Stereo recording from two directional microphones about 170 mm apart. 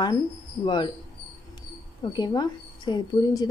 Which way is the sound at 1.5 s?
25° left (ahead or behind).